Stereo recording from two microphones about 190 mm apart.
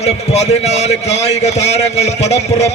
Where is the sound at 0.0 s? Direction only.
35° left (ahead or behind).